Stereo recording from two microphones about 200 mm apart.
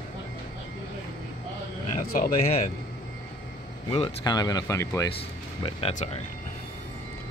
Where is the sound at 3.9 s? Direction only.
25° left (ahead or behind).